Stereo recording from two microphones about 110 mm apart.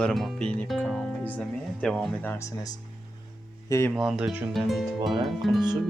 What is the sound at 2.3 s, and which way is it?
Speech, 30° left (ahead or behind).